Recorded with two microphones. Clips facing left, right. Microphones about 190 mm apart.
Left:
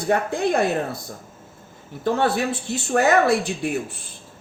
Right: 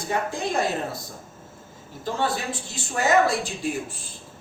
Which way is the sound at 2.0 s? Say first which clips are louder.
Left 6 dB; 60° left (ahead or behind).